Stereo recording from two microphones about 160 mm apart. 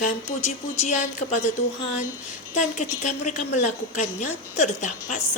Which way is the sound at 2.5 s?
50° left (ahead or behind).